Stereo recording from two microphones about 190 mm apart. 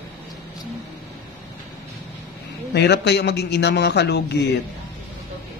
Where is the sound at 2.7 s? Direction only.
60° left (ahead or behind).